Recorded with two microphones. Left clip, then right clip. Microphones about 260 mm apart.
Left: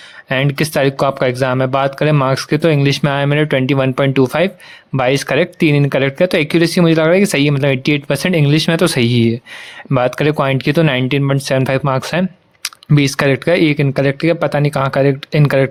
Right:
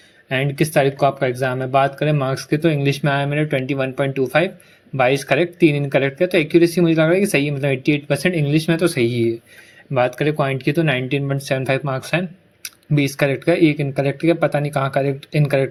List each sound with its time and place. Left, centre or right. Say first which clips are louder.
0.3 s speech: left 4 dB; left